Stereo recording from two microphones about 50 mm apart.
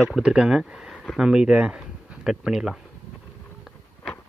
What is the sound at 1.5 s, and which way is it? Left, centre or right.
Speech, right.